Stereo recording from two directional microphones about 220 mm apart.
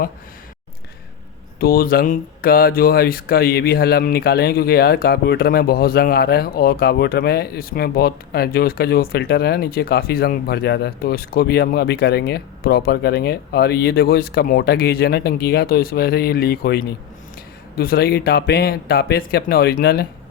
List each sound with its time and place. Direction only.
1.5 s speech: 45° left (ahead or behind)